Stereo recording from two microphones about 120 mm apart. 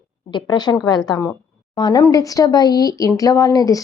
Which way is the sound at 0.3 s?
40° left (ahead or behind).